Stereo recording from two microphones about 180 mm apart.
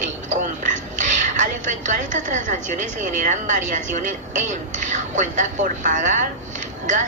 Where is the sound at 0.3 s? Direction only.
45° right (ahead or behind).